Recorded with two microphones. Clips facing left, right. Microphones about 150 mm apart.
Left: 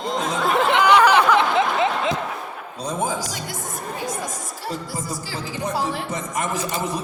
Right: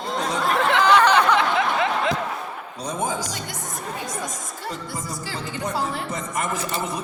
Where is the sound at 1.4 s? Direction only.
20° left (ahead or behind).